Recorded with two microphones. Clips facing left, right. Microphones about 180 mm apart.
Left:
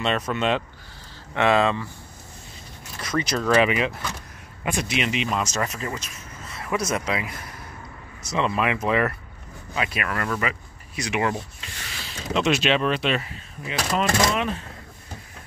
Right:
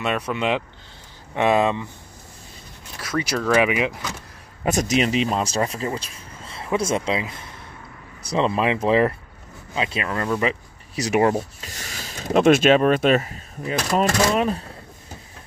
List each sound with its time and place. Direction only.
0.0 s speech: 10° right (ahead or behind)
3.0 s speech: 5° right (ahead or behind)
4.6 s speech: 40° right (ahead or behind); by 10.6 s 20° right (ahead or behind)
11.0 s speech: 40° right (ahead or behind)